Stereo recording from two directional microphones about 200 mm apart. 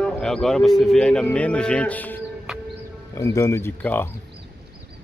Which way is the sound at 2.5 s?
Centre (ahead or behind).